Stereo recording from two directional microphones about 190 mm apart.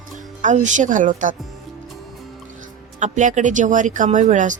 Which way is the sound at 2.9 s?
40° right (ahead or behind).